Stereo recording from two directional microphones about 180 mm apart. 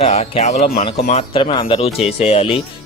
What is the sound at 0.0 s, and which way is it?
Speech, 35° left (ahead or behind).